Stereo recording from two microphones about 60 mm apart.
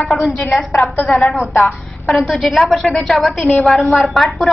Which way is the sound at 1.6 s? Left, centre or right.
Centre.